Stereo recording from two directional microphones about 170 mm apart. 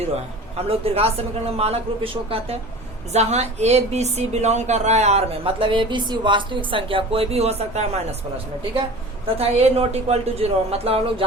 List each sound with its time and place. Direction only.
0.5 s speech: 35° right (ahead or behind)
9.2 s speech: 35° right (ahead or behind)